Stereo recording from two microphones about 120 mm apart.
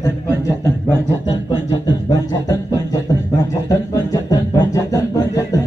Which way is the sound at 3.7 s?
30° left (ahead or behind).